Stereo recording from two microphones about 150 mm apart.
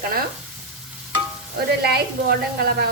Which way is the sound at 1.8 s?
90° right.